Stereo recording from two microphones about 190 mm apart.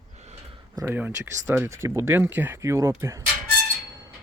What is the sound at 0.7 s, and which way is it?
Speech, 15° right (ahead or behind).